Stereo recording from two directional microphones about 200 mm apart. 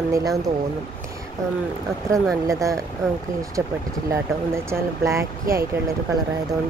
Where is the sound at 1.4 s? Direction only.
15° right (ahead or behind).